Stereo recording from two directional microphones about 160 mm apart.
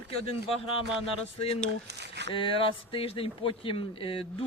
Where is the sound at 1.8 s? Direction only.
90° right.